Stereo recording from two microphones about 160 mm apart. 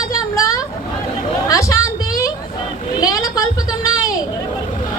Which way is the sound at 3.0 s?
20° left (ahead or behind).